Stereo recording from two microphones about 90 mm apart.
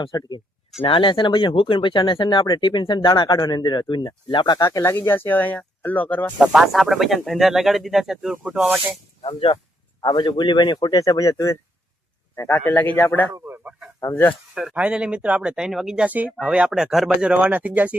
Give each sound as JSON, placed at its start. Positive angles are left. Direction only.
{"t": 0.2, "sound": "speech", "side_deg": 55}
{"t": 0.8, "sound": "speech", "side_deg": 75}
{"t": 4.8, "sound": "speech", "side_deg": 25}
{"t": 6.4, "sound": "speech", "side_deg": -5}
{"t": 9.2, "sound": "speech", "side_deg": 90}
{"t": 10.0, "sound": "speech", "side_deg": 55}
{"t": 12.5, "sound": "speech", "side_deg": 20}
{"t": 13.7, "sound": "speech", "side_deg": -10}
{"t": 14.0, "sound": "speech", "side_deg": 25}
{"t": 14.5, "sound": "speech", "side_deg": -5}